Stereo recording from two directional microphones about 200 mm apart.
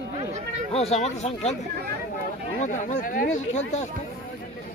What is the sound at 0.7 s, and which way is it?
Speech, 30° left (ahead or behind).